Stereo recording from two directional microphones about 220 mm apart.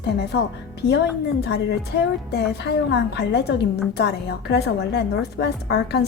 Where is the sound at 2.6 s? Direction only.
50° left (ahead or behind).